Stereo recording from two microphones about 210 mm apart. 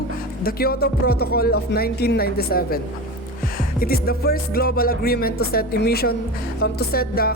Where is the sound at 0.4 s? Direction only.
45° left (ahead or behind).